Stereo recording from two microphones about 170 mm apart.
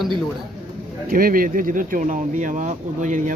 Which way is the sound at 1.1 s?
60° right (ahead or behind).